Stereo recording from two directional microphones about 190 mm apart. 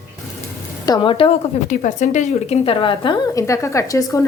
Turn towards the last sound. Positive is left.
turn(degrees=15)  # may be behind; listen again after turning